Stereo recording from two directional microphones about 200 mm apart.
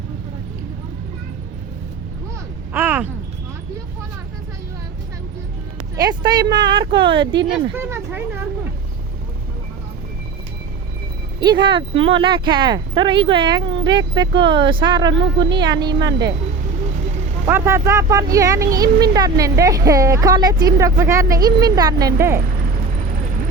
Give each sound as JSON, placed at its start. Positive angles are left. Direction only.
{"t": 2.7, "sound": "a sound", "side_deg": -10}
{"t": 6.0, "sound": "speech", "side_deg": -20}
{"t": 7.4, "sound": "speech", "side_deg": -10}
{"t": 11.3, "sound": "speech", "side_deg": -20}
{"t": 17.4, "sound": "speech", "side_deg": -15}